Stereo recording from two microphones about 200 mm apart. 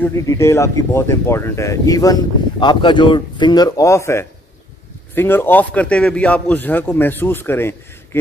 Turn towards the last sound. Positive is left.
turn(degrees=10)  # may be behind; listen again after turning